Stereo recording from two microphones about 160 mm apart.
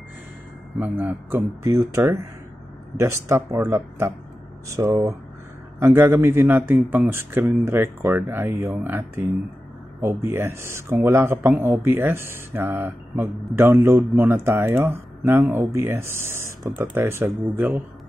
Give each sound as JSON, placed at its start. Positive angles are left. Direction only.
{"t": 0.7, "sound": "speech", "side_deg": -10}